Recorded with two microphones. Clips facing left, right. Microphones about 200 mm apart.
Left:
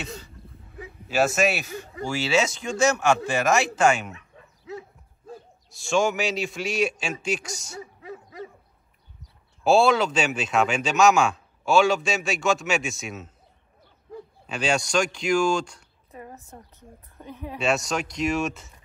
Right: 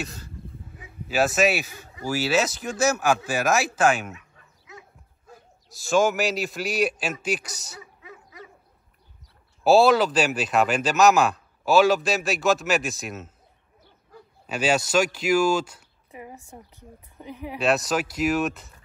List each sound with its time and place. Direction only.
0.0 s a sound: centre (ahead or behind)
1.0 s speech: centre (ahead or behind)
4.6 s dog: 30° left (ahead or behind)
5.7 s speech: centre (ahead or behind)
8.0 s dog: 30° left (ahead or behind)
9.2 s speech: centre (ahead or behind)
14.4 s speech: 5° right (ahead or behind)
17.6 s speech: centre (ahead or behind)